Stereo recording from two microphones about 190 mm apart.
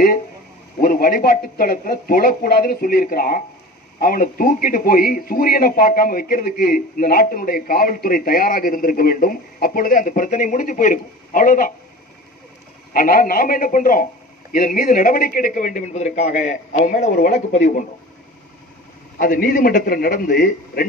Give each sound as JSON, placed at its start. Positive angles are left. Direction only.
{"t": 0.7, "sound": "a man's voice", "side_deg": 50}
{"t": 12.9, "sound": "a man's voice", "side_deg": 45}
{"t": 17.1, "sound": "speech", "side_deg": 55}
{"t": 17.5, "sound": "speech", "side_deg": 40}
{"t": 19.1, "sound": "a man's voice", "side_deg": 45}